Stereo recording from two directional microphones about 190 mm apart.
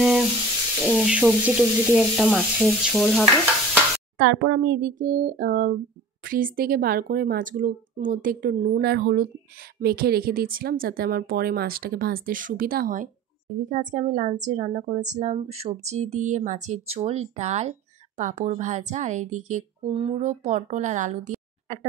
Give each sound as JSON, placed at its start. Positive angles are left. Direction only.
{"t": 0.0, "sound": "sizzle", "side_deg": -5}
{"t": 0.9, "sound": "frying", "side_deg": -5}
{"t": 2.0, "sound": "speech", "side_deg": 0}
{"t": 4.2, "sound": "a woman's voice", "side_deg": -55}